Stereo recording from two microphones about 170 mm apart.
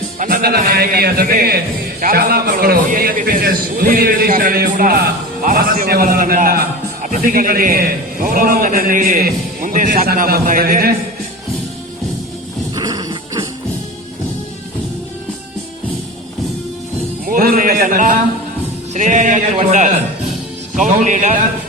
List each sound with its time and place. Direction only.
0.2 s a man's voice: 60° right (ahead or behind)
12.7 s music: 20° right (ahead or behind)
17.2 s a sound: 55° right (ahead or behind)
18.9 s speech: 45° right (ahead or behind)